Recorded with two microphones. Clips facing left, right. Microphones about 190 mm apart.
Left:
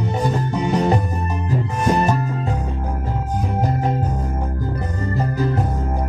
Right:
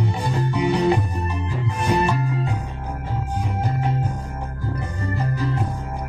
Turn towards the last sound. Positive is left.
turn(degrees=40)  # may be behind; listen again after turning